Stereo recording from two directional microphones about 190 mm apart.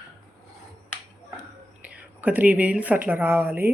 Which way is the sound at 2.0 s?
10° right (ahead or behind).